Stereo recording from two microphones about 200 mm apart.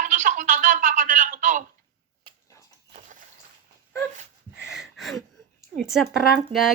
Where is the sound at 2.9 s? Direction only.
35° right (ahead or behind).